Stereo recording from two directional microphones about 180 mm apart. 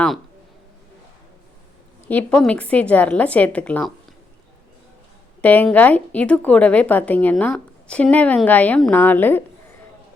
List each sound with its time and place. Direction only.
2.0 s a woman's voice: 5° left (ahead or behind)
5.4 s a woman's voice: 10° left (ahead or behind)